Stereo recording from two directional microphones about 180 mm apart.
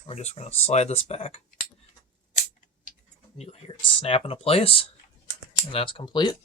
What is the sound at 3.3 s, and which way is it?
Speech, 35° left (ahead or behind).